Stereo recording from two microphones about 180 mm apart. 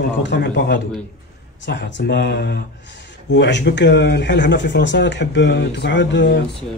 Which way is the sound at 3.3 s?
80° left.